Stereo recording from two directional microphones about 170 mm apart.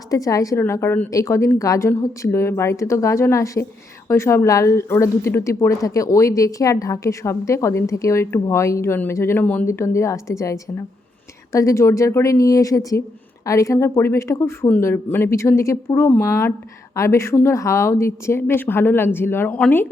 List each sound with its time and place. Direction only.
0.1 s a woman's voice: 20° left (ahead or behind)